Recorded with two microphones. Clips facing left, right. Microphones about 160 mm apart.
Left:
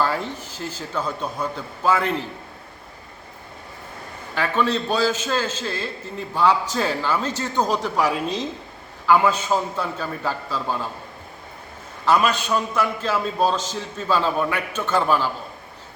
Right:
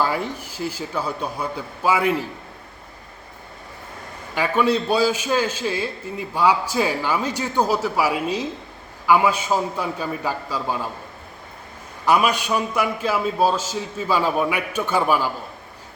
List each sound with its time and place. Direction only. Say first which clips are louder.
0.0 s a man's voice: right 1 dB; 10° right (ahead or behind)
4.4 s a man's voice: right 2 dB; 10° right (ahead or behind)
12.0 s a man's voice: right 1 dB; 10° right (ahead or behind)